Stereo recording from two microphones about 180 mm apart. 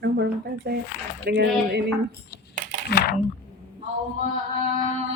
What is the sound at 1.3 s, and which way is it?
Speech, 65° right (ahead or behind).